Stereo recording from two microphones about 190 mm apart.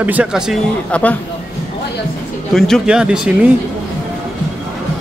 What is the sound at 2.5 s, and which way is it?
Speech, centre (ahead or behind).